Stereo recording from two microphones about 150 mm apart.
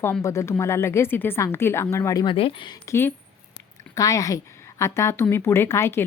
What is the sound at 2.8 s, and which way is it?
A woman's voice, 15° left (ahead or behind).